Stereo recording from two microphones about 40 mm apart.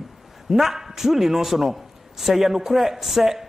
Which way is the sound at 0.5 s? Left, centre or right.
Centre.